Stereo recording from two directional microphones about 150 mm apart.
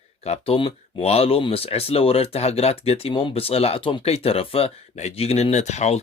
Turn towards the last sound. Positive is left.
turn(degrees=50)  # may be behind; listen again after turning